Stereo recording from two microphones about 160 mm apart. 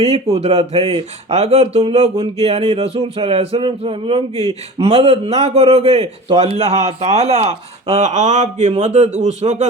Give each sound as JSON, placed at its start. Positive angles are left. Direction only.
{"t": 0.0, "sound": "speech", "side_deg": -40}